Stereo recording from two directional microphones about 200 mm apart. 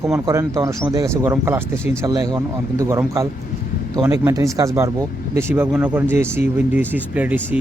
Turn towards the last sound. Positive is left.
turn(degrees=-10)  # may be behind; listen again after turning